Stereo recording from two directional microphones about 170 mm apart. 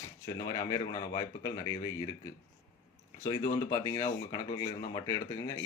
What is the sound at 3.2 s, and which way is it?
A man's voice, 20° left (ahead or behind).